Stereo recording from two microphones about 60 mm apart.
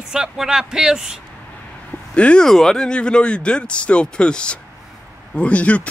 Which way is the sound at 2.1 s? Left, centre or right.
Centre.